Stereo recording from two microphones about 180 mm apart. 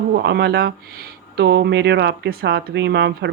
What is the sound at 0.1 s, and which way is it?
Speech, 70° right (ahead or behind).